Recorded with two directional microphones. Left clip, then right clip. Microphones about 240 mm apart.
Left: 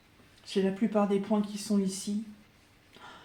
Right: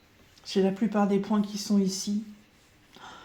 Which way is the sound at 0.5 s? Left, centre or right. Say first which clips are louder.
Right 2 dB; right.